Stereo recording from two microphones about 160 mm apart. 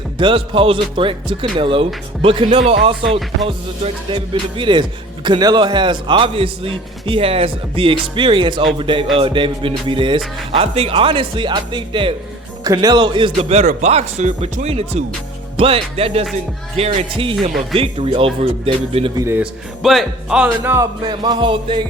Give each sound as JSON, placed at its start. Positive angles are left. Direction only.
{"t": 0.2, "sound": "speech", "side_deg": -30}
{"t": 3.0, "sound": "speech", "side_deg": 0}
{"t": 3.4, "sound": "speech", "side_deg": -35}
{"t": 12.6, "sound": "music", "side_deg": -25}
{"t": 13.7, "sound": "speech", "side_deg": -45}
{"t": 19.1, "sound": "speech", "side_deg": -20}
{"t": 19.4, "sound": "speech", "side_deg": 0}
{"t": 20.7, "sound": "music", "side_deg": -20}